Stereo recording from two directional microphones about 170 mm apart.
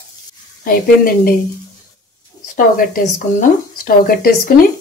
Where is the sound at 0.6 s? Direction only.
60° left (ahead or behind).